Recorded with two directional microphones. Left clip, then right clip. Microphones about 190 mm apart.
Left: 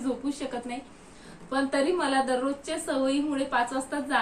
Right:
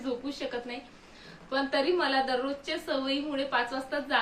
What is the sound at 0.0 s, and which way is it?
Speech, centre (ahead or behind).